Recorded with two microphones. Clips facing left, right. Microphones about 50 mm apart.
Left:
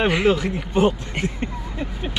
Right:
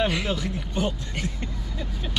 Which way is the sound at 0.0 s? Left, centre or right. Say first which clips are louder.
Left 7 dB; left.